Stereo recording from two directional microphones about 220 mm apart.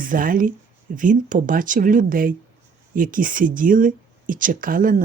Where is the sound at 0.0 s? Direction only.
40° right (ahead or behind).